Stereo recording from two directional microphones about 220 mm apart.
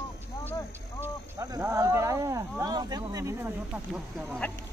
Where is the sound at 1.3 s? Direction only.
15° right (ahead or behind).